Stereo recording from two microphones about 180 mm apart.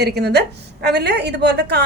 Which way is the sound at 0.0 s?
65° right (ahead or behind).